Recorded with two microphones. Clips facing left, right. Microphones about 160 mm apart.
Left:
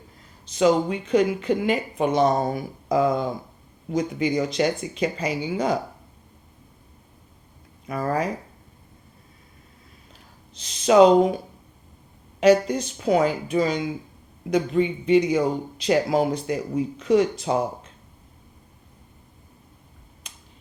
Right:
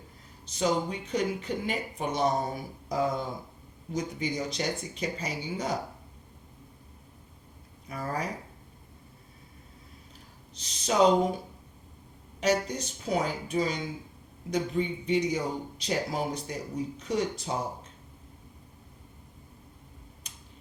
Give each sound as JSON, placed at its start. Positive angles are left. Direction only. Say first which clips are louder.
{"t": 0.6, "sound": "speech", "louder": "left 8 dB", "side_deg": 90}
{"t": 7.9, "sound": "speech", "louder": "left 9 dB", "side_deg": 90}
{"t": 10.6, "sound": "speech", "louder": "left 9 dB", "side_deg": 90}
{"t": 12.4, "sound": "speech", "louder": "left 10 dB", "side_deg": 90}